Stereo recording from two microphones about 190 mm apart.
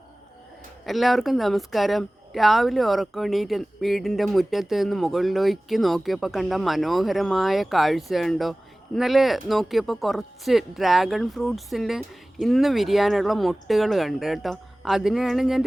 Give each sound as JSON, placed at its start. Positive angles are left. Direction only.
{"t": 0.9, "sound": "speech", "side_deg": 0}